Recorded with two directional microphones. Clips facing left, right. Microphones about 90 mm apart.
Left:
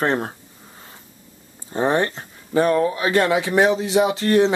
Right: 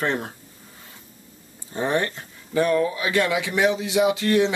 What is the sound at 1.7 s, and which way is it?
Speech, 35° left (ahead or behind).